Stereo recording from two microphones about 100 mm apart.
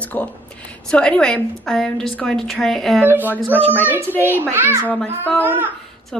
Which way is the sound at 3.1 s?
20° right (ahead or behind).